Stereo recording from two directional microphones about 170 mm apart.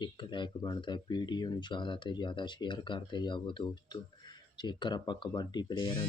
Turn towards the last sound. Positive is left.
turn(degrees=25)  # may be behind; listen again after turning